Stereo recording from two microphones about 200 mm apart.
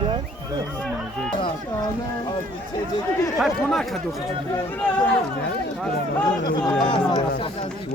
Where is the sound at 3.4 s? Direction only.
Centre (ahead or behind).